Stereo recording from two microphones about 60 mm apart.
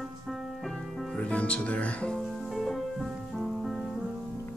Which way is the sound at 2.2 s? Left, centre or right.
Centre.